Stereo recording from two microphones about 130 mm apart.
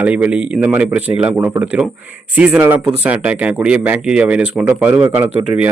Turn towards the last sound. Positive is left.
turn(degrees=-15)  # may be behind; listen again after turning